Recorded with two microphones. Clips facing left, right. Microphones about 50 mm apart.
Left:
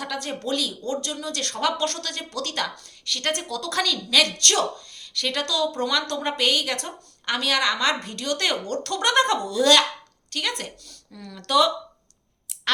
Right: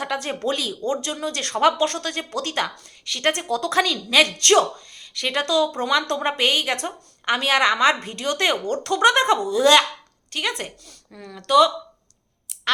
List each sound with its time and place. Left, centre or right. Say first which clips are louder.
0.0 s speech: right 5 dB; right
11.4 s speech: right 4 dB; centre